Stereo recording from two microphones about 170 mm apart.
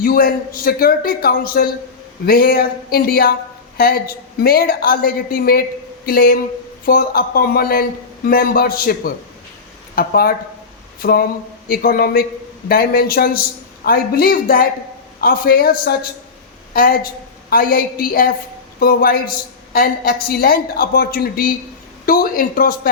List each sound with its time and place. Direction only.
0.0 s a man's voice: 55° left (ahead or behind)